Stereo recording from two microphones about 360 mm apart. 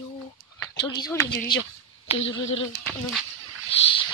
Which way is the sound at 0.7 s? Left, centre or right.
Centre.